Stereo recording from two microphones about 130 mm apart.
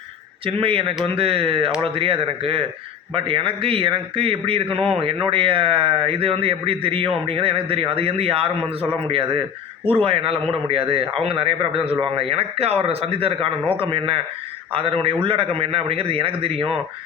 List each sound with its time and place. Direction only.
0.4 s a man's voice: 45° right (ahead or behind)